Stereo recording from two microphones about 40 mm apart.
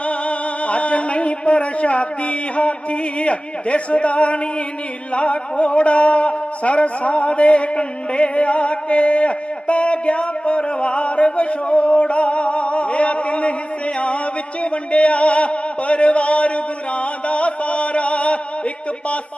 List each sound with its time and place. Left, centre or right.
0.0 s speech: left
14.6 s music: left